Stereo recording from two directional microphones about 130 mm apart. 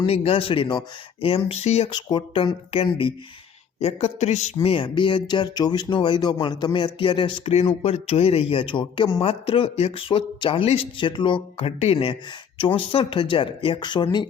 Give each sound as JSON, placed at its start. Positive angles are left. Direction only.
{"t": 0.0, "sound": "speech", "side_deg": 50}
{"t": 1.9, "sound": "speech", "side_deg": 35}
{"t": 3.8, "sound": "a woman's voice", "side_deg": 55}
{"t": 4.6, "sound": "speech", "side_deg": 45}